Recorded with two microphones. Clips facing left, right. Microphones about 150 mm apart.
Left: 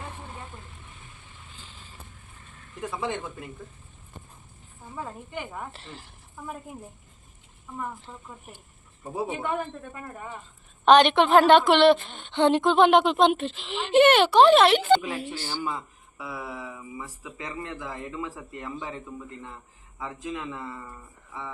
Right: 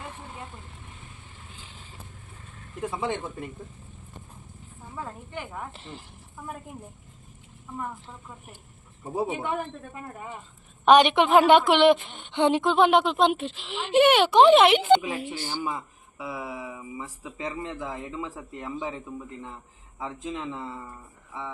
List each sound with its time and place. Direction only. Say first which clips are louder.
2.8 s speech: right 1 dB; 20° right (ahead or behind)
4.9 s speech: left 1 dB; 5° left (ahead or behind)
5.7 s speech: right 2 dB; 20° right (ahead or behind)
6.3 s speech: left 1 dB; centre (ahead or behind)
7.8 s a woman's voice: even; centre (ahead or behind)
14.3 s a woman's voice: right 2 dB; 15° right (ahead or behind)
17.3 s a woman's voice: right 3 dB; 25° right (ahead or behind); by 19.5 s 10° right (ahead or behind)
20.0 s a woman's voice: right 1 dB; 20° right (ahead or behind)